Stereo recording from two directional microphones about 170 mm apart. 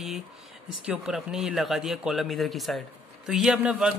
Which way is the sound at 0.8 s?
5° right (ahead or behind).